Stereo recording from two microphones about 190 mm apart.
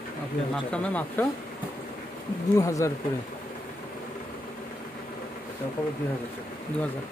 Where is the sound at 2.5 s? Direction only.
15° left (ahead or behind).